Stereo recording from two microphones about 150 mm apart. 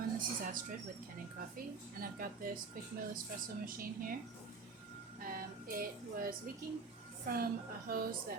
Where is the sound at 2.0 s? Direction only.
75° right (ahead or behind).